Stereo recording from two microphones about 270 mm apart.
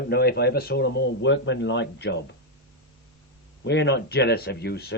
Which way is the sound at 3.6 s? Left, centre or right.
Left.